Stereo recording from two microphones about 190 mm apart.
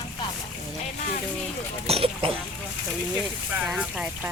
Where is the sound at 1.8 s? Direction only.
30° right (ahead or behind).